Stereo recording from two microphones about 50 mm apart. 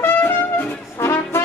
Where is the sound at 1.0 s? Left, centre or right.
Left.